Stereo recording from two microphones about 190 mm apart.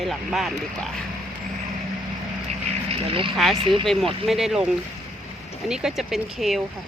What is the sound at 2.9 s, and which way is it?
Speech, 30° right (ahead or behind).